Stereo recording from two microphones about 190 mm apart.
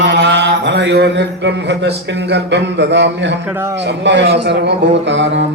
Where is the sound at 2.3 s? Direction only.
65° right (ahead or behind).